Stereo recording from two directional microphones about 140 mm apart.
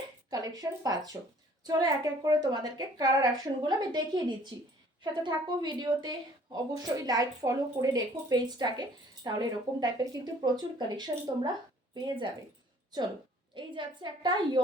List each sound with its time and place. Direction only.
0.3 s a woman's voice: 25° right (ahead or behind)
5.2 s a woman's voice: 35° right (ahead or behind)
13.5 s a woman's voice: 35° right (ahead or behind)